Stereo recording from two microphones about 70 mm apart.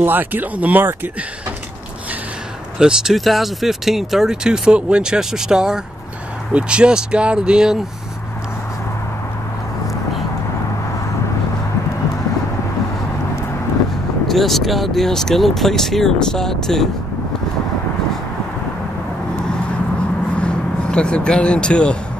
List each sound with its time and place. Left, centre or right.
0.0 s speech: right
2.8 s speech: centre
14.2 s speech: centre
19.3 s vehicle: centre